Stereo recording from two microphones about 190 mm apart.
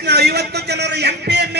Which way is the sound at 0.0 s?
60° right (ahead or behind).